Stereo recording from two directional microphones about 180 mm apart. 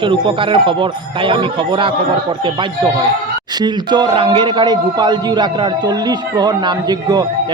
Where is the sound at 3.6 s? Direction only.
25° right (ahead or behind).